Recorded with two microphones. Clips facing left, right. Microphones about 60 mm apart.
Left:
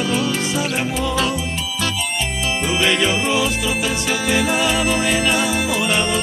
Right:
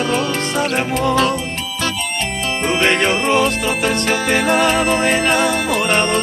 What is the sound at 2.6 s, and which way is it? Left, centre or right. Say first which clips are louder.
Music: right 3 dB; right.